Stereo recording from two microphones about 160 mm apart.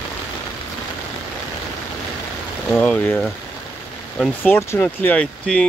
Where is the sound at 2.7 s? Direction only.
10° left (ahead or behind).